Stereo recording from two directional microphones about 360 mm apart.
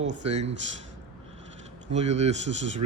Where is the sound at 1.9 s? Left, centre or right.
Centre.